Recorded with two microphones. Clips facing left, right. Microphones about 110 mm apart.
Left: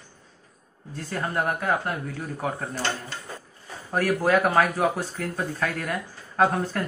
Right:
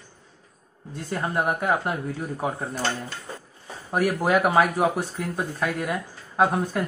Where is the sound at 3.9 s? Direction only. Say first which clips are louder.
Even; 15° right (ahead or behind).